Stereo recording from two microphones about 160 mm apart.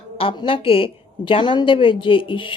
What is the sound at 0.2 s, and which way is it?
A woman's voice, 35° left (ahead or behind).